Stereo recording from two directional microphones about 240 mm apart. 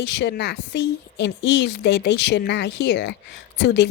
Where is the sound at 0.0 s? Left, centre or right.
Left.